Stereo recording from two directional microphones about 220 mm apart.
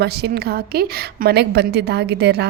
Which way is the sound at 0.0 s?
45° right (ahead or behind).